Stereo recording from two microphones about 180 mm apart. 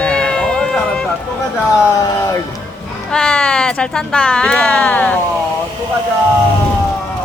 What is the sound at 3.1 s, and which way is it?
Speech, 5° left (ahead or behind).